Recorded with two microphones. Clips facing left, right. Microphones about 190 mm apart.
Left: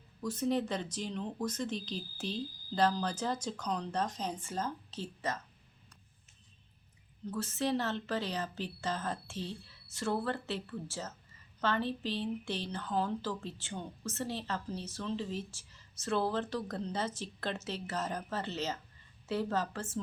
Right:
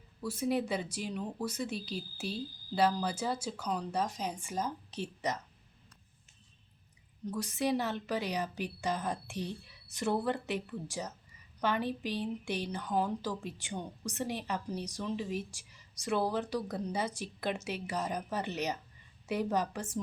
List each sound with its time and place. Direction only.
0.2 s speech: 10° right (ahead or behind)
7.3 s speech: 15° right (ahead or behind)